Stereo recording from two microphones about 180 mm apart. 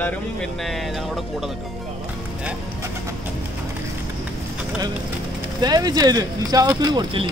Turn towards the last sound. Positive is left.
turn(degrees=-25)  # may be behind; listen again after turning